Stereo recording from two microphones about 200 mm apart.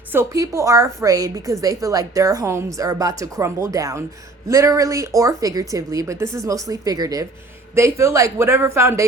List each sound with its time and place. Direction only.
0.1 s speech: 15° right (ahead or behind)